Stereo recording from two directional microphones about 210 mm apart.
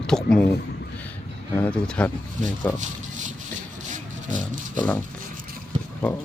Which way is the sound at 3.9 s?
35° right (ahead or behind).